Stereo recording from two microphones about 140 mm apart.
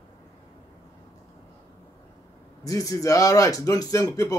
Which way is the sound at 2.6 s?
25° left (ahead or behind).